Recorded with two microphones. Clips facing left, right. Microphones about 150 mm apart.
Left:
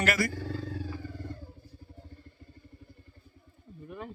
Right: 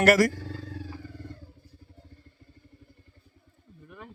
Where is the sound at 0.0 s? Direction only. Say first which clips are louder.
Right 9 dB; 90° right.